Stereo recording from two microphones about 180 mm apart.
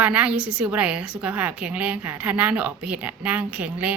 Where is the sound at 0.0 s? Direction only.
5° right (ahead or behind).